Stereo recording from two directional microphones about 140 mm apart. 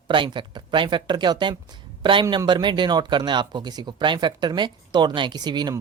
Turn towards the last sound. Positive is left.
turn(degrees=-30)  # may be behind; listen again after turning